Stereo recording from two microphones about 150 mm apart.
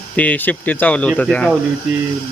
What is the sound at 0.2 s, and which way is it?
Speech, 10° left (ahead or behind).